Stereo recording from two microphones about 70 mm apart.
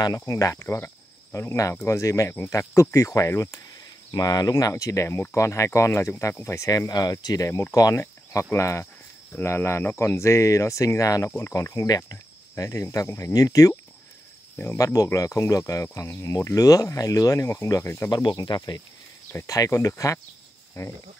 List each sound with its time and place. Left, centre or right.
0.3 s speech: left
0.6 s speech: left
1.9 s speech: left
4.1 s speech: left
6.9 s speech: left
7.9 s speech: left
11.2 s speech: left
11.5 s speech: left
13.3 s speech: left
14.8 s speech: left
18.1 s speech: left
19.4 s speech: left